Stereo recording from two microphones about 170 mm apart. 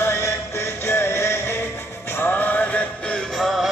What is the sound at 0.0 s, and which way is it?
Music, 15° left (ahead or behind).